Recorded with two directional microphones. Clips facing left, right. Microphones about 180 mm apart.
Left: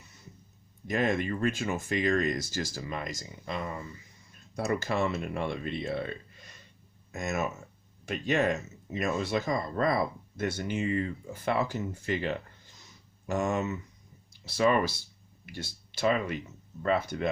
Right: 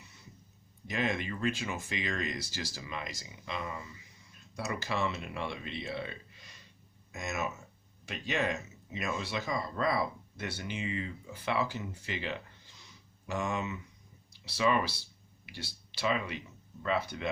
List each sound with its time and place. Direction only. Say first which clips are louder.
0.9 s speech: left 5 dB; 50° left (ahead or behind)